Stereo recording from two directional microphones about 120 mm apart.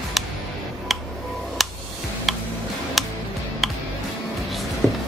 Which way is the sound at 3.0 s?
Centre (ahead or behind).